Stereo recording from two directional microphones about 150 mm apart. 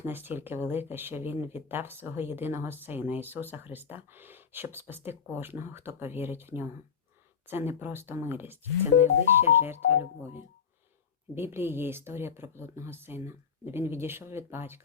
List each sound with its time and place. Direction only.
0.0 s speech: 15° right (ahead or behind)
11.3 s speech: 15° right (ahead or behind)